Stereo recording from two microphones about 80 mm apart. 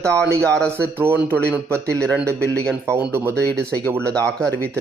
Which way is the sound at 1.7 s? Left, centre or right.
Centre.